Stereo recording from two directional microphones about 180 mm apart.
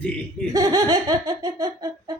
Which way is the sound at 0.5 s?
20° right (ahead or behind).